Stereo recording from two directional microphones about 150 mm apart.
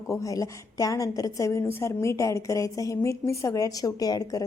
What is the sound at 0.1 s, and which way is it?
A woman's voice, 20° left (ahead or behind).